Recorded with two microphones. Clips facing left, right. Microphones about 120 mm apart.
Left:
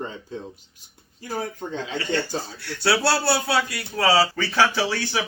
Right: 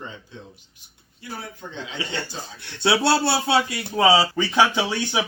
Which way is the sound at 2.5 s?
20° right (ahead or behind).